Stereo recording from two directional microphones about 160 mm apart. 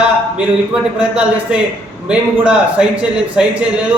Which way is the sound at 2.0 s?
5° right (ahead or behind).